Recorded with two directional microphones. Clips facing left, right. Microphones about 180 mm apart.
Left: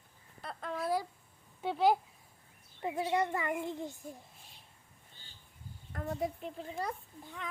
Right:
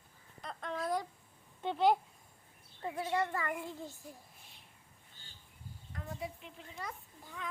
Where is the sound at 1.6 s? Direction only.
5° left (ahead or behind).